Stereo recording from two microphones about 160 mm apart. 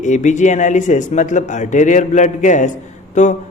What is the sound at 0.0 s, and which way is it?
A man's voice, 50° left (ahead or behind).